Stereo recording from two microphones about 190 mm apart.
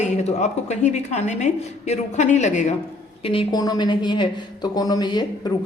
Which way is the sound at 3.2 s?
25° left (ahead or behind).